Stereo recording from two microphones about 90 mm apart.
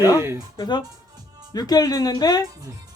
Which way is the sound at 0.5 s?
55° left (ahead or behind).